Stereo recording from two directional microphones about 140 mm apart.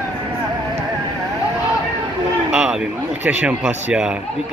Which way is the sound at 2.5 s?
5° right (ahead or behind).